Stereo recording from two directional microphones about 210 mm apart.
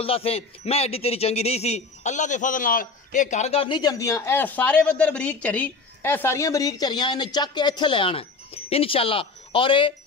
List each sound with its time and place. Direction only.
0.0 s speech: 25° left (ahead or behind)